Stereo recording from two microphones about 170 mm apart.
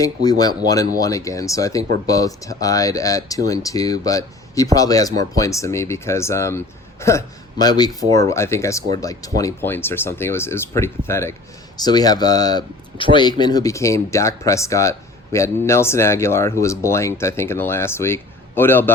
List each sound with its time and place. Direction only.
0.0 s speech: 20° left (ahead or behind)